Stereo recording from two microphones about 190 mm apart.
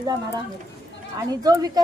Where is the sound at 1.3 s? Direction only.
20° right (ahead or behind).